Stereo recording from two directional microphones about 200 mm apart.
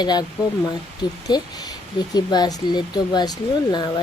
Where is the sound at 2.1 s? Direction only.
20° left (ahead or behind).